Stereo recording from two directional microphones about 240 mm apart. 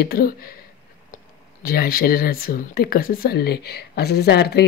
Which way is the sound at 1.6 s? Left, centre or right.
Left.